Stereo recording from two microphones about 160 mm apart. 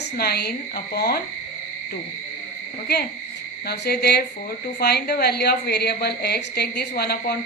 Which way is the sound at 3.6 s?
85° left.